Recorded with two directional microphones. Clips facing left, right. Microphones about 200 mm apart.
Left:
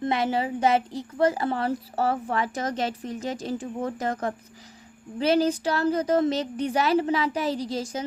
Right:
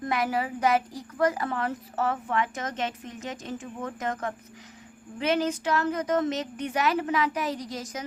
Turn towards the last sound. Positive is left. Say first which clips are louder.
# left 5 dB
turn(degrees=30)  # may be behind; listen again after turning